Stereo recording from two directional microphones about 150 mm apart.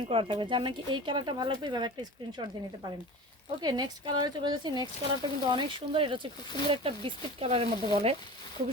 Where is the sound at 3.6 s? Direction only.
25° right (ahead or behind).